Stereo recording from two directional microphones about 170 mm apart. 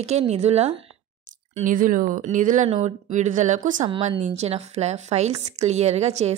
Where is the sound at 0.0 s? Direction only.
40° right (ahead or behind).